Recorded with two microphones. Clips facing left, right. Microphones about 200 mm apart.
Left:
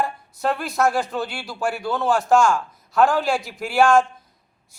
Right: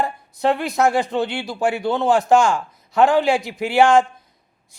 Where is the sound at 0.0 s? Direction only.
20° right (ahead or behind).